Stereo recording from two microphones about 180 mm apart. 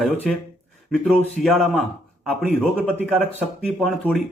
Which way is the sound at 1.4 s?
50° left (ahead or behind).